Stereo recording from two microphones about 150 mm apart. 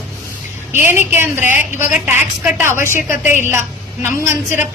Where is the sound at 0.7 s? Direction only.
15° right (ahead or behind).